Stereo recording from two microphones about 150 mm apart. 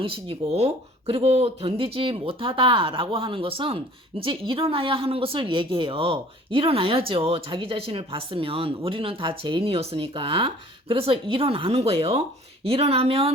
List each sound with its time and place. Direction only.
0.0 s speech: 40° right (ahead or behind)